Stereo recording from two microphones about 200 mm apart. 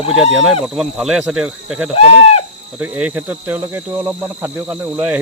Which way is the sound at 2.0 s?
30° left (ahead or behind).